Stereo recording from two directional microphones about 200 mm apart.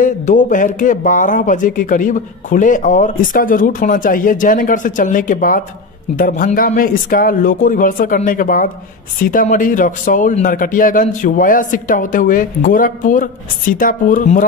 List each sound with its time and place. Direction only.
0.0 s speech: 40° left (ahead or behind)